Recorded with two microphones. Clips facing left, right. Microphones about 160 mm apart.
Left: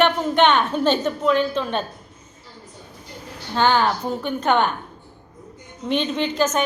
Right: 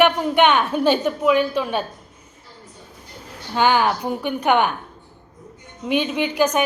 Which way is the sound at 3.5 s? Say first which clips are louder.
Right 1 dB; 15° right (ahead or behind).